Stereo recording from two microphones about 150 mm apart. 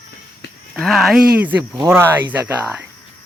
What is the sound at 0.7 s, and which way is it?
Speech, centre (ahead or behind).